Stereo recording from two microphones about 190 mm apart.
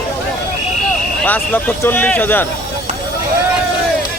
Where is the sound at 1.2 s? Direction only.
10° left (ahead or behind).